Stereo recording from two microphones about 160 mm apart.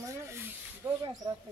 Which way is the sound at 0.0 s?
15° right (ahead or behind).